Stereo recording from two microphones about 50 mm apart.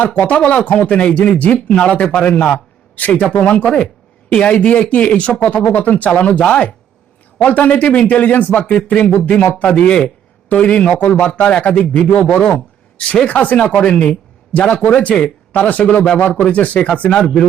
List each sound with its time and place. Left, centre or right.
0.0 s speech: left
2.9 s a man's voice: left; by 17.4 s centre